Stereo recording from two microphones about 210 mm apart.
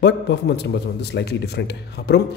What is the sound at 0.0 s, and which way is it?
A man's voice, 55° left (ahead or behind).